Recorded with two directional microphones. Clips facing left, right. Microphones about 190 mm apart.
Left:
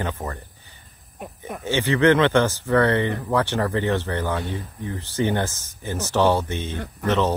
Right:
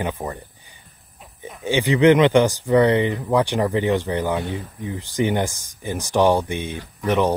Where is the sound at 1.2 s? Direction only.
60° left (ahead or behind).